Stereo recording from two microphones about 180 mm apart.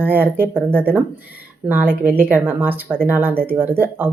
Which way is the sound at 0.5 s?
10° left (ahead or behind).